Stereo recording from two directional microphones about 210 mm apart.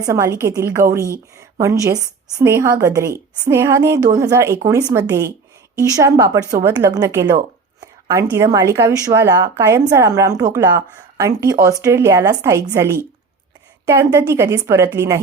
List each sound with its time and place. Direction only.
0.0 s a woman's voice: 15° right (ahead or behind)